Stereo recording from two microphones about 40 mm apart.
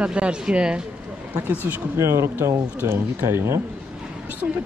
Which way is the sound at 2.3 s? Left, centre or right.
Right.